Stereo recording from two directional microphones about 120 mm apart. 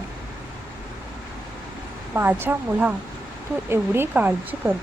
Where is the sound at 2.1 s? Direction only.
20° right (ahead or behind).